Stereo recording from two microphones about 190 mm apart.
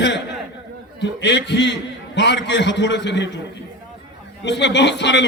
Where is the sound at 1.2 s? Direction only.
65° left (ahead or behind).